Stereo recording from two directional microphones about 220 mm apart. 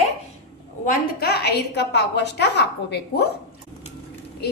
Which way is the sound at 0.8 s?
40° left (ahead or behind).